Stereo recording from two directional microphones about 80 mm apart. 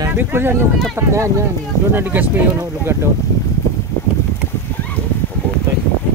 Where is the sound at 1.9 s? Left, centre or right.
Right.